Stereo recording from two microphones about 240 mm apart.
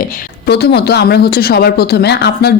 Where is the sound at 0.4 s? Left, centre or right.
Left.